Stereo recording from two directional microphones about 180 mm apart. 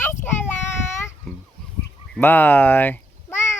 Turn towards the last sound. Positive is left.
turn(degrees=15)  # may be behind; listen again after turning